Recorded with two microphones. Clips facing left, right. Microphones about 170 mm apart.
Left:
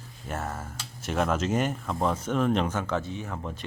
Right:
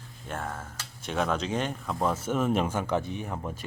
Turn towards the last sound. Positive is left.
turn(degrees=-10)  # may be behind; listen again after turning